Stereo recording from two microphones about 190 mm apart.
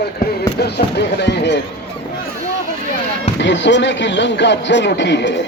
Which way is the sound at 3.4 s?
70° left (ahead or behind).